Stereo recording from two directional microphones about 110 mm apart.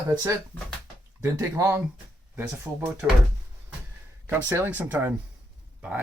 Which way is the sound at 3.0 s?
15° right (ahead or behind).